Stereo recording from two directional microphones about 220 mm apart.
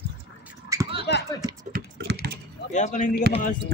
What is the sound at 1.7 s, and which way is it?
Typing, 45° right (ahead or behind).